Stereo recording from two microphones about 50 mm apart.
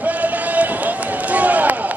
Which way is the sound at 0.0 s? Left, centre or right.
Right.